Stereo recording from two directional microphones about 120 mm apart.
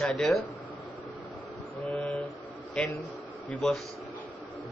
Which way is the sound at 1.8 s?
5° left (ahead or behind).